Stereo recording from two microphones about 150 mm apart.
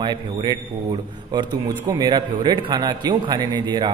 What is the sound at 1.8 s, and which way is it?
A man's voice, 25° right (ahead or behind).